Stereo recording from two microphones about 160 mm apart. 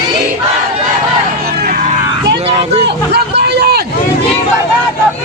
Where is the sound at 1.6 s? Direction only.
65° right (ahead or behind).